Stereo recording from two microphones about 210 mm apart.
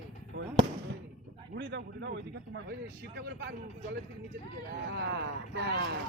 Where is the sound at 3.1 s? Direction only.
55° right (ahead or behind).